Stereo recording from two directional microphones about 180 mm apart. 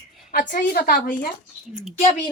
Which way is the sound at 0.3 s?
50° left (ahead or behind).